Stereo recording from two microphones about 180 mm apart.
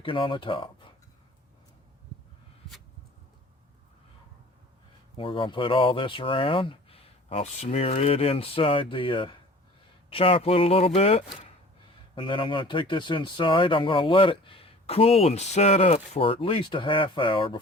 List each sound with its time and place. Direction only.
0.0 s speech: 30° left (ahead or behind)
5.1 s speech: 30° left (ahead or behind)